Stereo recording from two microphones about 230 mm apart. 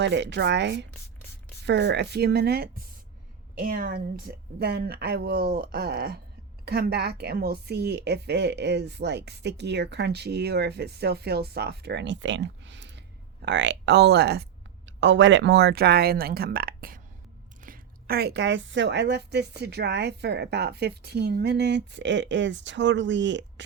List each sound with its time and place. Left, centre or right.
0.0 s a woman's voice: right